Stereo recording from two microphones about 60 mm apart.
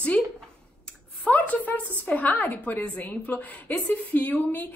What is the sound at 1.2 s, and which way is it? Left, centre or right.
A woman's voice, left.